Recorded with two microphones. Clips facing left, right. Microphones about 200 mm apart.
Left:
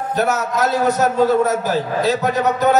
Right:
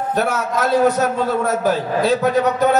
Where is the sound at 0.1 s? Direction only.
50° right (ahead or behind).